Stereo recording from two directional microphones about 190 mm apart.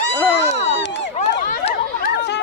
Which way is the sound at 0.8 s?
70° left (ahead or behind).